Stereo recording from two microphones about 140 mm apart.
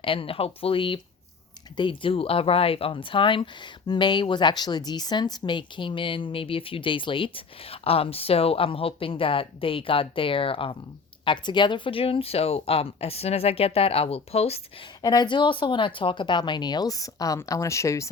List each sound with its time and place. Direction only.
0.0 s speech: 40° left (ahead or behind)
15.0 s speech: 30° left (ahead or behind)